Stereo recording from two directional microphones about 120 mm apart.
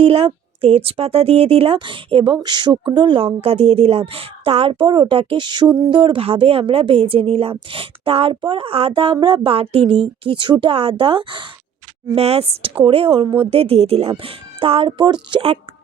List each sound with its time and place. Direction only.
0.0 s speech: 55° right (ahead or behind)
12.1 s speech: 55° right (ahead or behind)